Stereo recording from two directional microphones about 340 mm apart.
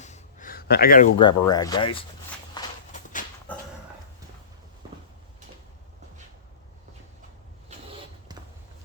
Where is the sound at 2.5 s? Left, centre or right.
Left.